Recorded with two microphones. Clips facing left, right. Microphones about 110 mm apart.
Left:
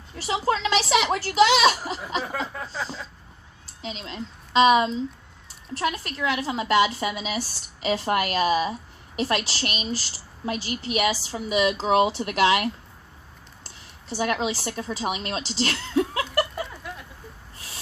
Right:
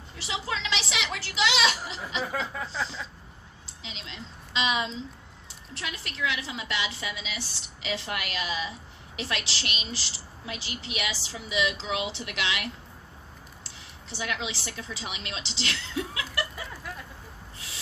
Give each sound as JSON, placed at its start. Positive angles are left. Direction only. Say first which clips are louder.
{"t": 0.2, "sound": "a woman's voice", "louder": "left 9 dB", "side_deg": 45}
{"t": 2.3, "sound": "a sound", "louder": "left 1 dB", "side_deg": 0}
{"t": 3.8, "sound": "a woman's voice", "louder": "left 9 dB", "side_deg": 45}
{"t": 13.7, "sound": "a woman's voice", "louder": "left 10 dB", "side_deg": 45}
{"t": 16.6, "sound": "vehicle", "louder": "left 2 dB", "side_deg": 0}